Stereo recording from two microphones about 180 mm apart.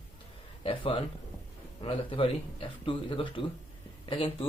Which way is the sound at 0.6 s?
30° left (ahead or behind).